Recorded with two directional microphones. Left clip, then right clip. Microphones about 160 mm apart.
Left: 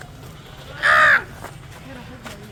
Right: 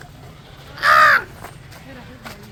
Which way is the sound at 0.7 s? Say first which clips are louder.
Right 2 dB; 40° right (ahead or behind).